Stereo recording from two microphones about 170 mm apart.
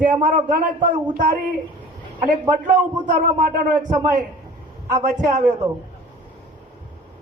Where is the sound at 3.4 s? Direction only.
50° right (ahead or behind).